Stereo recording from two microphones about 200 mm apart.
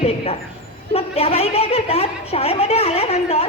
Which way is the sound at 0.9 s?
30° left (ahead or behind).